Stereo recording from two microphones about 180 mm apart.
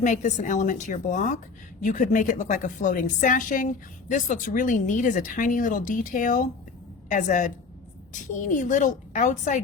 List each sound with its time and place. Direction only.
0.0 s a woman's voice: 40° left (ahead or behind)